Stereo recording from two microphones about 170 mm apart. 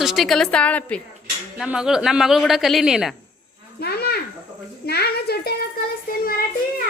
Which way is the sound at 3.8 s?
70° left (ahead or behind).